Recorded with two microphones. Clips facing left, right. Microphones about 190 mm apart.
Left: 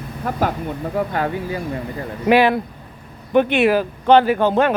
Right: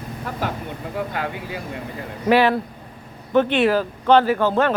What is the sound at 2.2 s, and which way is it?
A man's voice, 15° left (ahead or behind).